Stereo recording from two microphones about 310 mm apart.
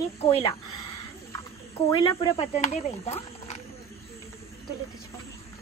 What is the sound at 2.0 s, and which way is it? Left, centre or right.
Speech, centre.